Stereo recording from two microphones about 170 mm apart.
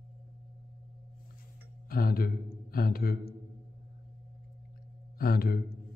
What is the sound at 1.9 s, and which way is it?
Speech, 60° left (ahead or behind).